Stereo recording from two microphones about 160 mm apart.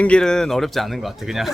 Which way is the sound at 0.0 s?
5° left (ahead or behind).